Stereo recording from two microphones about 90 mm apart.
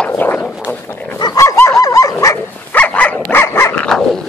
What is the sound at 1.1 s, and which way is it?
Dog, 50° left (ahead or behind).